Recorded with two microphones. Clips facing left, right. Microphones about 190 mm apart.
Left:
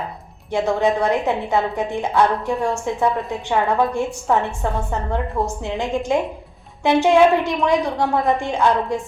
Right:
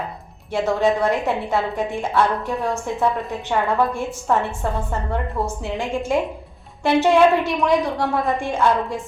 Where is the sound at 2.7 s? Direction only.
Centre (ahead or behind).